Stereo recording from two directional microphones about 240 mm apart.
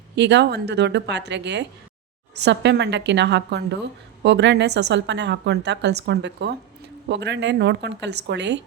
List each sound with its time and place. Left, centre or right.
0.2 s a woman's voice: right